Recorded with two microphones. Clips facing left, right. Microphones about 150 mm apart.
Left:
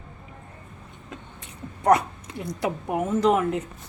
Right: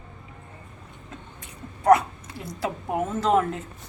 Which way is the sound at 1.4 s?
20° left (ahead or behind).